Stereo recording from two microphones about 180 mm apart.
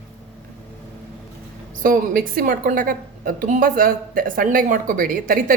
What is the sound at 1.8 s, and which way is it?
A woman's voice, 50° right (ahead or behind).